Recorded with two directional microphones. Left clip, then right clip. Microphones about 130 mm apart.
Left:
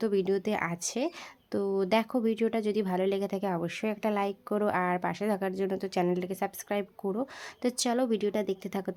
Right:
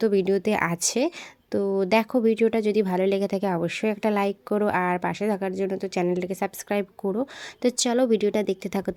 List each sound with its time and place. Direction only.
0.0 s a woman's voice: 30° right (ahead or behind)
1.5 s a woman's voice: 25° right (ahead or behind)